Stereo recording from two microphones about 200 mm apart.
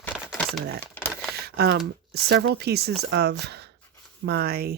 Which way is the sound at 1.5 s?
55° right (ahead or behind).